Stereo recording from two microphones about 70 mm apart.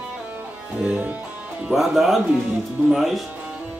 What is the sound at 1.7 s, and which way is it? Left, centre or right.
Speech, centre.